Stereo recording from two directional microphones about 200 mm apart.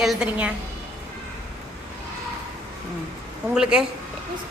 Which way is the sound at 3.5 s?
5° right (ahead or behind).